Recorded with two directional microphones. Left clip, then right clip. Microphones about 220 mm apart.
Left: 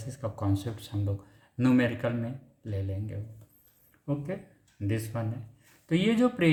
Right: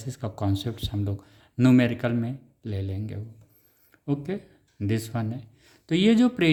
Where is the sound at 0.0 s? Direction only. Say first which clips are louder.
Right 3 dB; 50° right (ahead or behind).